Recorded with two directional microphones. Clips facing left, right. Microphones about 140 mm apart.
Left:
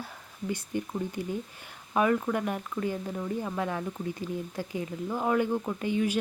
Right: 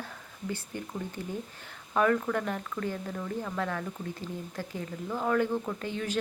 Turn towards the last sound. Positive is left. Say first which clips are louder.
# left 5 dB
turn(degrees=15)  # may be behind; listen again after turning